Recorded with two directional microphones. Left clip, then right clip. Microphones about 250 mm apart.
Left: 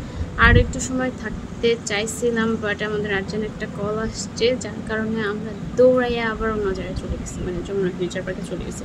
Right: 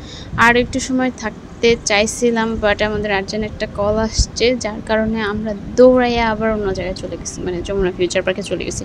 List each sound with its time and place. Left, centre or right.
0.4 s speech: right